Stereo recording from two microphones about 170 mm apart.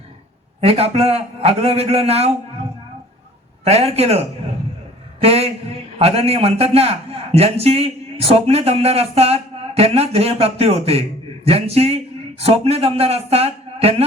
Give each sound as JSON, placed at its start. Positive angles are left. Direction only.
{"t": 0.6, "sound": "speech", "side_deg": -35}
{"t": 3.6, "sound": "speech", "side_deg": -35}
{"t": 5.2, "sound": "speech", "side_deg": -35}